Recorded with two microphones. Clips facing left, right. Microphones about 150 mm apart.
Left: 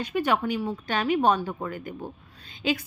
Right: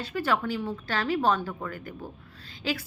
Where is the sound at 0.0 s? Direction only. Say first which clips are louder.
Left 3 dB; 15° left (ahead or behind).